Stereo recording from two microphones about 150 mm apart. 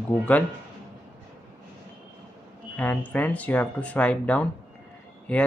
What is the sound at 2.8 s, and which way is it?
Speech, 10° left (ahead or behind).